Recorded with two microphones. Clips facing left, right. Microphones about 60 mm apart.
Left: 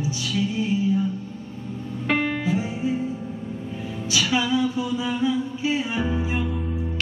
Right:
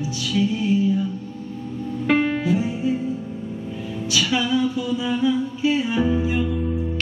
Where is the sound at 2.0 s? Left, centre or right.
Centre.